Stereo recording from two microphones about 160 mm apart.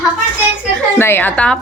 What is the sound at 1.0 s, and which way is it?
Speech, 15° left (ahead or behind).